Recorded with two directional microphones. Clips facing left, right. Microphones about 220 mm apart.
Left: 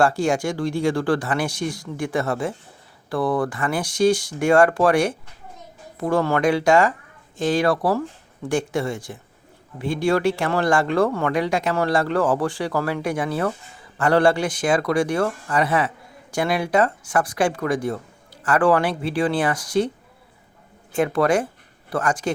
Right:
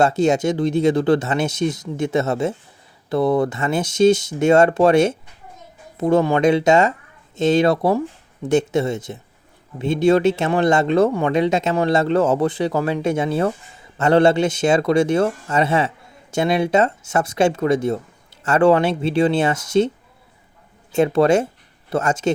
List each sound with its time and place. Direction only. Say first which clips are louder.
0.0 s speech: right 3 dB; 20° right (ahead or behind)
20.9 s speech: right 4 dB; 25° right (ahead or behind)